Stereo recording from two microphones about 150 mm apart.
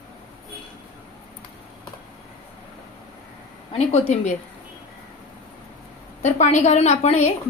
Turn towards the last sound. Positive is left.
turn(degrees=45)  # may be behind; listen again after turning